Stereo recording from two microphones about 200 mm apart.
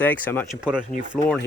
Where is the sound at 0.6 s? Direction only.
5° right (ahead or behind).